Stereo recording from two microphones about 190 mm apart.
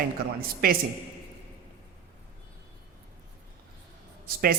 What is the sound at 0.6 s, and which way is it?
Speech, 50° right (ahead or behind).